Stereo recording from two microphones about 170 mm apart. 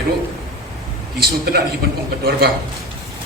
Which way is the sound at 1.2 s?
65° right (ahead or behind).